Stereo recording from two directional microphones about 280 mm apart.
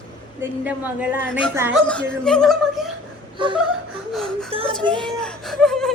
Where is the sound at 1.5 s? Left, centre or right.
Centre.